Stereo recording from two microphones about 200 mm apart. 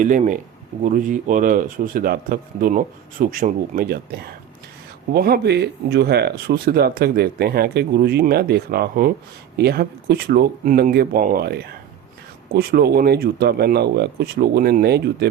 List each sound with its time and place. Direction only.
0.0 s speech: 40° right (ahead or behind)